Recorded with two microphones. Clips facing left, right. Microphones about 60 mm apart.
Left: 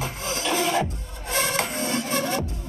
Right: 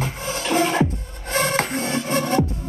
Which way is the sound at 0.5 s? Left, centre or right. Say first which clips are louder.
Right 7 dB; right.